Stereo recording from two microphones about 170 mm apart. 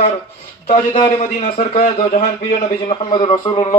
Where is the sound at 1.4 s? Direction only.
50° left (ahead or behind).